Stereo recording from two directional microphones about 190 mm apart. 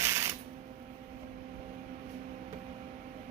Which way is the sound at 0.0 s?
15° right (ahead or behind).